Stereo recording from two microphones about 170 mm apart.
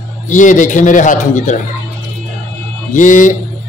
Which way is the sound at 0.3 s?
50° left (ahead or behind).